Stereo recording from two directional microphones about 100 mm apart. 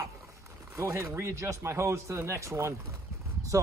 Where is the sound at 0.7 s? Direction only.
30° right (ahead or behind).